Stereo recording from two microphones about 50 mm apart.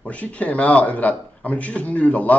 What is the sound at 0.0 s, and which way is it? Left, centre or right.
A man's voice, left.